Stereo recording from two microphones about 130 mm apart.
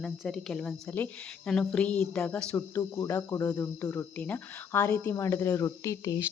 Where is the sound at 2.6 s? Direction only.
20° left (ahead or behind).